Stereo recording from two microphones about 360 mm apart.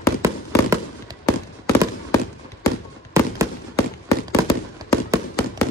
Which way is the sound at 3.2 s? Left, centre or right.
Centre.